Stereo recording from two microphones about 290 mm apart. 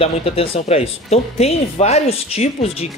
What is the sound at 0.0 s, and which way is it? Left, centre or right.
Speech, centre.